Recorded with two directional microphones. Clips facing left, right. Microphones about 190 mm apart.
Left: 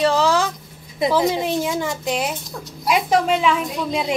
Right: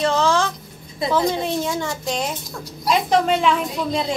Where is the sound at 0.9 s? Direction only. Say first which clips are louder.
Left 2 dB; 15° left (ahead or behind).